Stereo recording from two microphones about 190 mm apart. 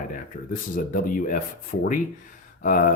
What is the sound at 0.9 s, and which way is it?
Speech, 45° left (ahead or behind).